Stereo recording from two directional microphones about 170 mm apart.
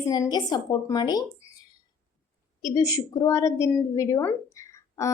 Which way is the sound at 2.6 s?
20° left (ahead or behind).